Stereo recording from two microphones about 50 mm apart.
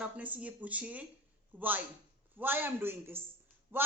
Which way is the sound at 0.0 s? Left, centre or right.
Right.